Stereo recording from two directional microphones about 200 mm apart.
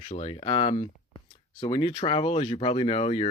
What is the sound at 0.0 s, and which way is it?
Speech, 30° left (ahead or behind).